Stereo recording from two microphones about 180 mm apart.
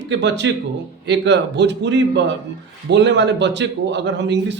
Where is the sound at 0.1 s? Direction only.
75° right (ahead or behind).